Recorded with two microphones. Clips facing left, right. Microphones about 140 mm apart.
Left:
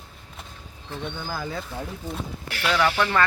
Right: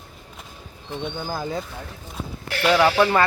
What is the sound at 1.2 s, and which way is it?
Speech, 20° right (ahead or behind).